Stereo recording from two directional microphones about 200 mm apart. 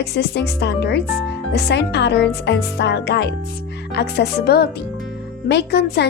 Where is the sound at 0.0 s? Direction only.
55° left (ahead or behind).